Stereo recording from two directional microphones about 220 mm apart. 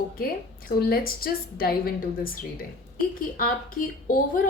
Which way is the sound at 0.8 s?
45° left (ahead or behind).